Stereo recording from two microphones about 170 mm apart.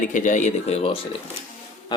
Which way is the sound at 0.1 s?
50° left (ahead or behind).